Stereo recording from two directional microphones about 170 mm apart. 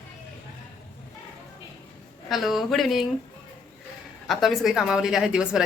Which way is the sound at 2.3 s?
Centre (ahead or behind).